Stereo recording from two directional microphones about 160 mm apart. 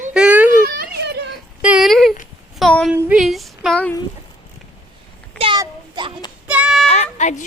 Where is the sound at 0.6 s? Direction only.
80° right.